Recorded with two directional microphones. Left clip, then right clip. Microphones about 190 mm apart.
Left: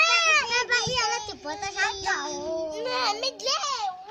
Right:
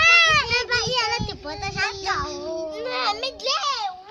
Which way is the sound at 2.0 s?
Centre (ahead or behind).